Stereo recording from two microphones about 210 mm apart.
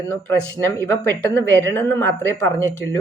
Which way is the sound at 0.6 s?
10° left (ahead or behind).